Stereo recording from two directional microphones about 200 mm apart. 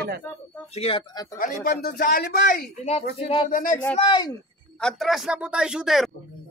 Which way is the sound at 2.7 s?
35° left (ahead or behind).